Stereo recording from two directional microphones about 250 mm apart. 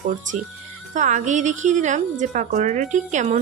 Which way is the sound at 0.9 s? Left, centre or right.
Right.